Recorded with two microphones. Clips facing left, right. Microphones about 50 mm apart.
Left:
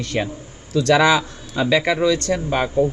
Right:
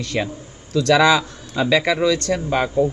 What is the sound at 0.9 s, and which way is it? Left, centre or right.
A man's voice, centre.